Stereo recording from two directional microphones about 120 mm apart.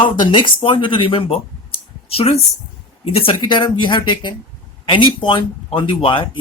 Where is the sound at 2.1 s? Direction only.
60° left (ahead or behind).